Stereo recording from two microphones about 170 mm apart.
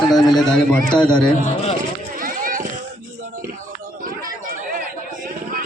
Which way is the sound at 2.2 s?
55° right (ahead or behind).